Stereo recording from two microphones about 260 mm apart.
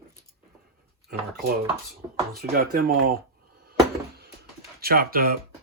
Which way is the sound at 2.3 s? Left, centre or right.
Right.